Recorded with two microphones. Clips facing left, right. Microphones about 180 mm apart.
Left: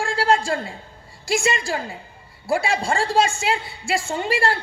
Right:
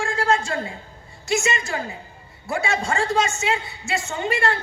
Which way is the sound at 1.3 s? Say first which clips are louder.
Left 1 dB; 30° left (ahead or behind).